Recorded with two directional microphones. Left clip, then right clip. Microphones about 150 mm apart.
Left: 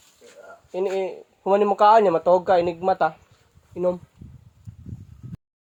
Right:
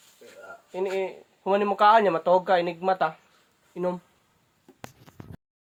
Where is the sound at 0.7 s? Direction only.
70° left (ahead or behind).